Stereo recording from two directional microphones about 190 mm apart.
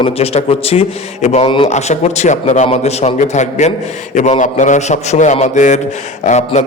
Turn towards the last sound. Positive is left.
turn(degrees=35)  # may be behind; listen again after turning